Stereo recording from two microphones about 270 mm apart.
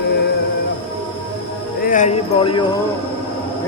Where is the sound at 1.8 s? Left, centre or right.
Left.